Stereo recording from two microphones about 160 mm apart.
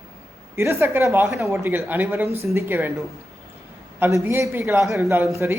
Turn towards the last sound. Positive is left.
turn(degrees=-15)  # may be behind; listen again after turning